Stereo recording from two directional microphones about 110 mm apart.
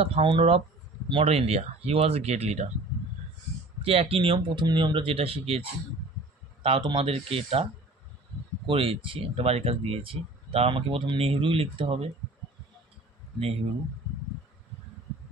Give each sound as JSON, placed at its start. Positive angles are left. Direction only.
{"t": 0.0, "sound": "speech", "side_deg": -60}
{"t": 3.8, "sound": "speech", "side_deg": -65}
{"t": 4.6, "sound": "speech", "side_deg": -45}
{"t": 6.6, "sound": "speech", "side_deg": -50}
{"t": 7.1, "sound": "speech", "side_deg": -60}
{"t": 8.6, "sound": "speech", "side_deg": -55}